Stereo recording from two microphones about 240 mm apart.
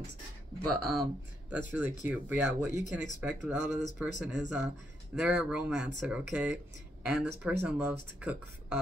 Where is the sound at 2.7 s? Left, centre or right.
Left.